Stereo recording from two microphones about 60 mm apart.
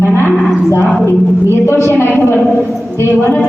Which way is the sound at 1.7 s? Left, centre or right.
Left.